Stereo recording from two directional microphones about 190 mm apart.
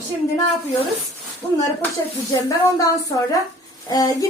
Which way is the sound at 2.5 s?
20° left (ahead or behind).